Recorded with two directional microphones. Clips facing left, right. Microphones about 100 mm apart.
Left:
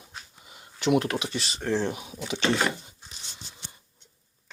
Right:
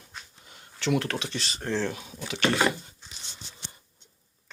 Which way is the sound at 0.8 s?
20° left (ahead or behind).